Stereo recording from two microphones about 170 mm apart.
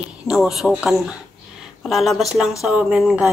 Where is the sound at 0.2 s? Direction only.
5° right (ahead or behind).